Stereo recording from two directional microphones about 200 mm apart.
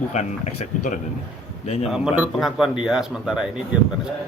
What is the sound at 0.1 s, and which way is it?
Speech, 35° left (ahead or behind).